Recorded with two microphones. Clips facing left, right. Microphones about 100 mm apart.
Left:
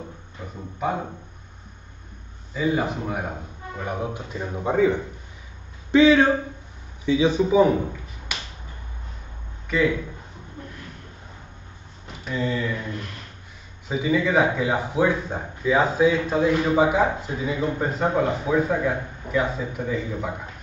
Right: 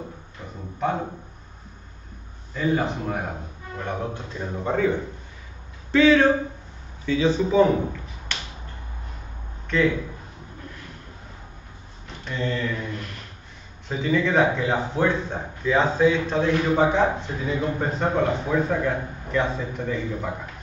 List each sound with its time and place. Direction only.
0.4 s a sound: 5° left (ahead or behind)
0.8 s a man's voice: 5° left (ahead or behind)
2.5 s a man's voice: 5° left (ahead or behind)
12.3 s speech: 5° left (ahead or behind)
13.8 s a man's voice: 5° left (ahead or behind)